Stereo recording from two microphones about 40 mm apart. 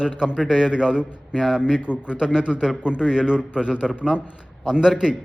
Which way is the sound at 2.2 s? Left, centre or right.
Centre.